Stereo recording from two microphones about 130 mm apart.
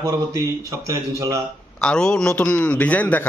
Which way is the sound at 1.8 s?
5° left (ahead or behind).